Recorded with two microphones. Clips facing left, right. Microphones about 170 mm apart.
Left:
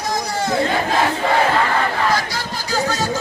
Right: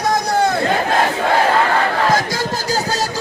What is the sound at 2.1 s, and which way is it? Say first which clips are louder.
Music: right 4 dB; 45° right (ahead or behind).